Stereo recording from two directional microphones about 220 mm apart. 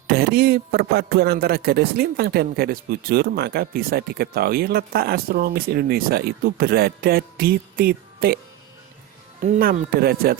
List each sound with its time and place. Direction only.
0.1 s speech: 45° right (ahead or behind)
9.4 s speech: 40° right (ahead or behind)